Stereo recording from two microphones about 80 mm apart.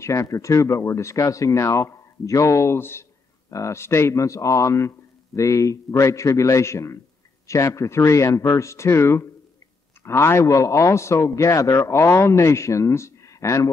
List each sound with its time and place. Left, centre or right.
0.0 s speech: left